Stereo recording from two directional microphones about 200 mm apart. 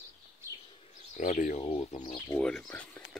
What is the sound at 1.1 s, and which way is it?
Speech, 40° left (ahead or behind).